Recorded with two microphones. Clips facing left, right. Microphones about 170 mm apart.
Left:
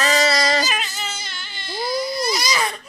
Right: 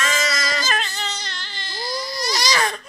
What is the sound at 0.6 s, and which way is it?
Baby cry, centre (ahead or behind).